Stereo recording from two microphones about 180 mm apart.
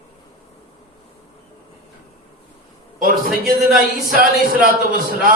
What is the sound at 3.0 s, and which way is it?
A man's voice, 55° right (ahead or behind).